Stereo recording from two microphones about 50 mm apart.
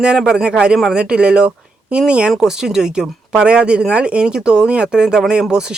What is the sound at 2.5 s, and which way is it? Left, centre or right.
Speech, centre.